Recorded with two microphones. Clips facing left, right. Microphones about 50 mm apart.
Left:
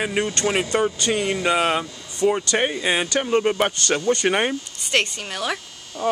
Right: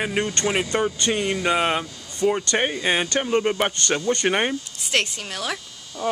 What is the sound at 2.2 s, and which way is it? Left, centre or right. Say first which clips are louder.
Speech: left 1 dB; centre.